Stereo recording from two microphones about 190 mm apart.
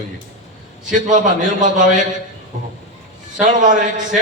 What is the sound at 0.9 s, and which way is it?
A man's voice, 40° right (ahead or behind).